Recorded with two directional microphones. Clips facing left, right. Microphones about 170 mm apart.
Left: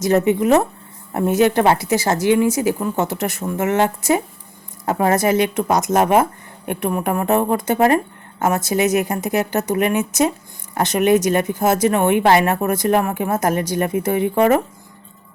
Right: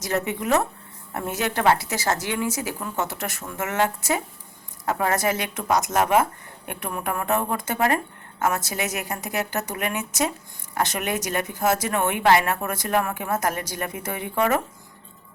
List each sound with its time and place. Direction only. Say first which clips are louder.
0.0 s speech: left 10 dB; 20° left (ahead or behind)
3.4 s speech: left 6 dB; 30° left (ahead or behind)